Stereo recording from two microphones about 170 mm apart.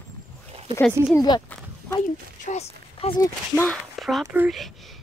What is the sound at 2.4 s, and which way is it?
Speech, 40° left (ahead or behind).